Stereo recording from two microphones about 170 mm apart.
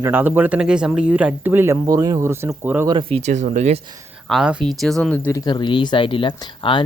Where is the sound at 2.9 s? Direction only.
30° right (ahead or behind).